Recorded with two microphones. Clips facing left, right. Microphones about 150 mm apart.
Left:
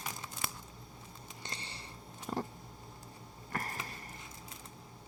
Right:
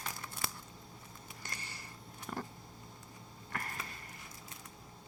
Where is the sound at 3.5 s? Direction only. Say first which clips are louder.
Left 3 dB; 35° left (ahead or behind).